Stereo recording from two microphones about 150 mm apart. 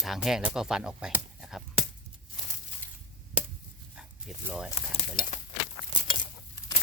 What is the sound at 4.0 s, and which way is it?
Dog, 5° right (ahead or behind).